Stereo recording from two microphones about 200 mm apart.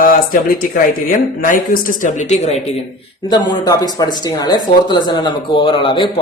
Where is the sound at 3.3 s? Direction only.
20° left (ahead or behind).